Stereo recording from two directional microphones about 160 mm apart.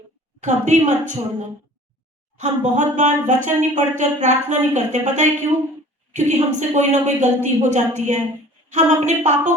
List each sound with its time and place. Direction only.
0.4 s speech: 50° right (ahead or behind)
2.4 s speech: 50° right (ahead or behind)